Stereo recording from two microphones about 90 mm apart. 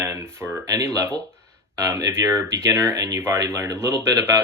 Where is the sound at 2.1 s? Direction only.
30° right (ahead or behind).